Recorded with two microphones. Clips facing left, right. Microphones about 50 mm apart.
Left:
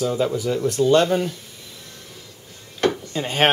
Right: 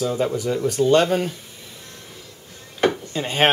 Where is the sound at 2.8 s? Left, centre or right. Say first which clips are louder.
Right 1 dB; centre.